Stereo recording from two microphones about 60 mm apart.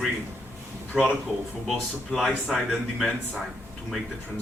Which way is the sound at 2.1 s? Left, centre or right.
Centre.